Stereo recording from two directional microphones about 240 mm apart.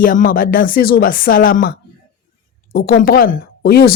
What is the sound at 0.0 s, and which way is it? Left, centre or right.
A woman's voice, left.